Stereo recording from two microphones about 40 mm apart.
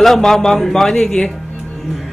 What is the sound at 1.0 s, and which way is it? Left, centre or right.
Speech, left.